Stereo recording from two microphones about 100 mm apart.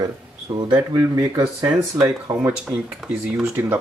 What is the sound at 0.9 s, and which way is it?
Speech, 35° right (ahead or behind).